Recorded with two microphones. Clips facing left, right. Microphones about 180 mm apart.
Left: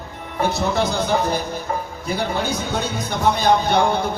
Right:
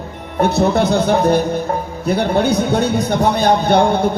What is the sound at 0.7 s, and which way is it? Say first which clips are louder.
A man's voice: right 6 dB; 60° right (ahead or behind).